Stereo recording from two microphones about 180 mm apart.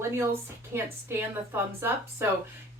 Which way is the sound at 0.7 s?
15° right (ahead or behind).